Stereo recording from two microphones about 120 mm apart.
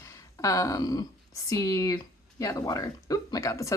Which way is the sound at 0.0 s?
25° left (ahead or behind).